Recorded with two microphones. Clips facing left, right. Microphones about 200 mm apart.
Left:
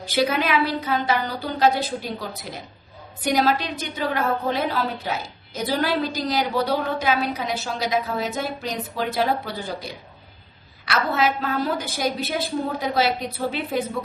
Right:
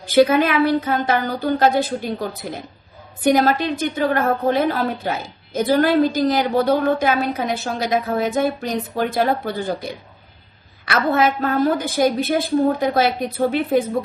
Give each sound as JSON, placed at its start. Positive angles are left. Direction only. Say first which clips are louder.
{"t": 0.0, "sound": "a woman's voice", "louder": "right 8 dB", "side_deg": -50}